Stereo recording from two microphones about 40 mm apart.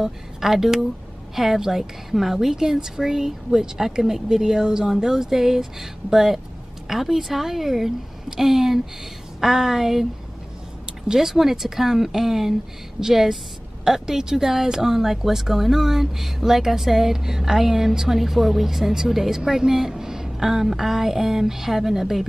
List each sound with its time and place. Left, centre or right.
0.0 s speech: centre
11.1 s speech: centre